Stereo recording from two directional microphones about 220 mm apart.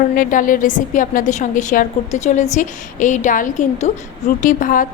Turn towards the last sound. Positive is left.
turn(degrees=35)  # may be behind; listen again after turning